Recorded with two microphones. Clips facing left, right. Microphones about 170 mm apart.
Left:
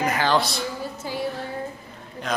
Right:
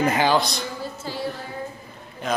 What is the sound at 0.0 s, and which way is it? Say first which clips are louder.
Speech: right 3 dB; 25° right (ahead or behind).